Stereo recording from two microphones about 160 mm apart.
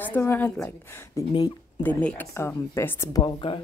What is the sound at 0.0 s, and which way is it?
A woman's voice, 10° left (ahead or behind).